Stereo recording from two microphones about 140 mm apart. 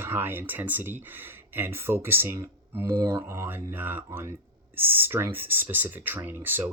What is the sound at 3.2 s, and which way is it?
Speech, 15° right (ahead or behind).